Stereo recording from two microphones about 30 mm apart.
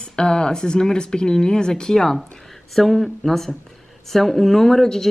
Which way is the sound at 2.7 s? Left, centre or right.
Centre.